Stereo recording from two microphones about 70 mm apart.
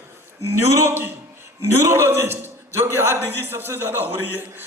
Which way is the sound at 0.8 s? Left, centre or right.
Right.